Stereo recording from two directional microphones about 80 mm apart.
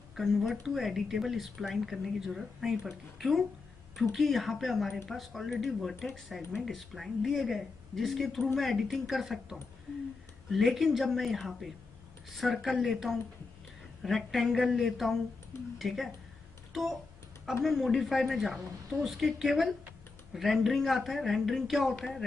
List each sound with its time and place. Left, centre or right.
0.1 s speech: centre
17.6 s speech: centre